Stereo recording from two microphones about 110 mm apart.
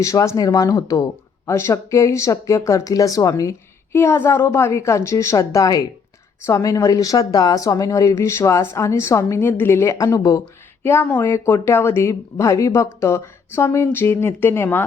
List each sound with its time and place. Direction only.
0.0 s speech: 30° left (ahead or behind)